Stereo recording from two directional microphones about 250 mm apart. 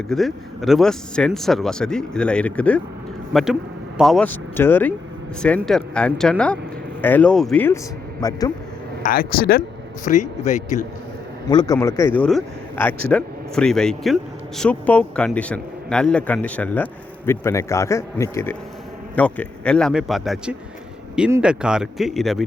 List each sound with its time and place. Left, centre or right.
0.1 s speech: centre
9.0 s a man's voice: left
11.4 s speech: centre